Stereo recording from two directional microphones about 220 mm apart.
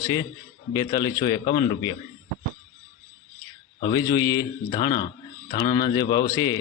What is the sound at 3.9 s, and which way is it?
A man's voice, 15° left (ahead or behind).